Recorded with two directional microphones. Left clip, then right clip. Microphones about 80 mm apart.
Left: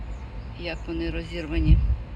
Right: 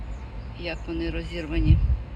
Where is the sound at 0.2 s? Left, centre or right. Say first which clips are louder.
Even; right.